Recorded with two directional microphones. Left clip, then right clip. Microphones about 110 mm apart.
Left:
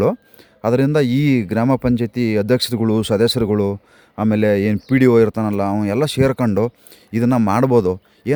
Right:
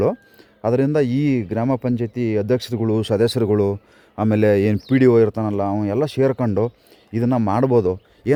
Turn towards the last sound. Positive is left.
turn(degrees=30)  # may be behind; listen again after turning